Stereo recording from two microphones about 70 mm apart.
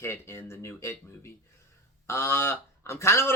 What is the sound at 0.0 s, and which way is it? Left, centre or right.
Speech, left.